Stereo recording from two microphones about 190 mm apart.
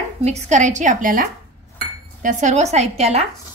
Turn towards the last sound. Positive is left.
turn(degrees=-35)  # may be behind; listen again after turning